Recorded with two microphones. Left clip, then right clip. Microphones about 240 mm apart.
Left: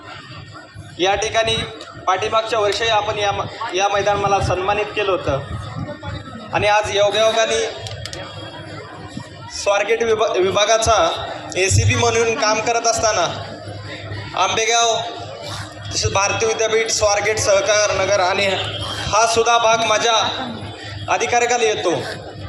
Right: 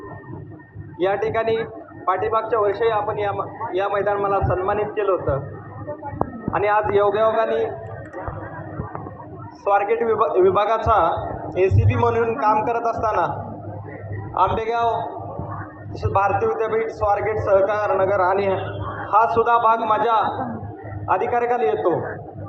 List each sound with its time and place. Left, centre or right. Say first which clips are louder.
0.9 s a man's voice: left 3 dB; left
6.5 s a man's voice: left 3 dB; left
9.6 s a man's voice: left 2 dB; left
14.3 s a man's voice: left 3 dB; left